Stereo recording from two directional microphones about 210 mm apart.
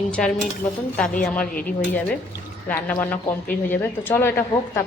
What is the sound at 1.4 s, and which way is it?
Speech, 45° left (ahead or behind).